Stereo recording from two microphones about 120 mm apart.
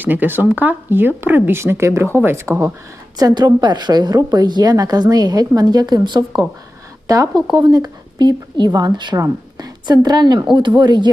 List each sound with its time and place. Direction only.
0.0 s a woman's voice: 15° right (ahead or behind); by 11.1 s 40° right (ahead or behind)